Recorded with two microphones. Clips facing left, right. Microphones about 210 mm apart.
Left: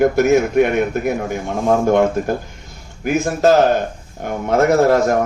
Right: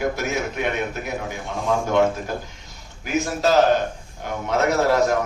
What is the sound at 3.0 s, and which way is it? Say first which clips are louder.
Speech: left 7 dB; 50° left (ahead or behind).